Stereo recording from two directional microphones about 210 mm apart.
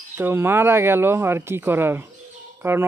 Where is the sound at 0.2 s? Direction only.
10° right (ahead or behind).